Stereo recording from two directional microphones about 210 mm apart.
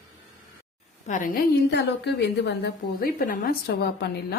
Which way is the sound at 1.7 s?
55° left (ahead or behind).